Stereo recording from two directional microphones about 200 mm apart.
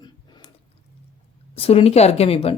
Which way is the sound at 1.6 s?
30° left (ahead or behind).